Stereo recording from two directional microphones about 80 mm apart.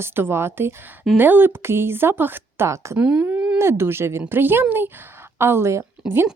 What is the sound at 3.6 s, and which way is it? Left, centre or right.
Speech, right.